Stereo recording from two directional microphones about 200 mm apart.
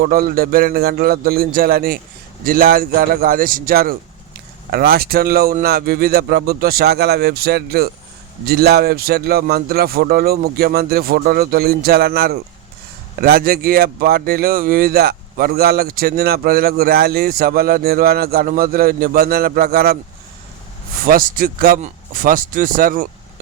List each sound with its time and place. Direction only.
0.0 s a man's voice: 45° right (ahead or behind)
21.0 s a man's voice: 45° right (ahead or behind)